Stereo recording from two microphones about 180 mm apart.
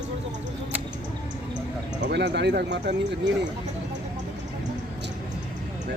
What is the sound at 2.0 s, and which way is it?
Speech, 75° right (ahead or behind).